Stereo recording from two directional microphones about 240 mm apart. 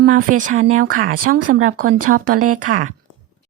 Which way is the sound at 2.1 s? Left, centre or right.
Right.